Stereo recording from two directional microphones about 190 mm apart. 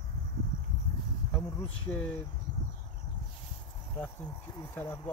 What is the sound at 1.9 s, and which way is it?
Speech, 5° left (ahead or behind).